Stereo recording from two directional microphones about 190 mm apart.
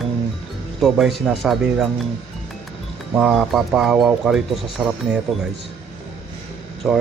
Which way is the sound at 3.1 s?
Centre (ahead or behind).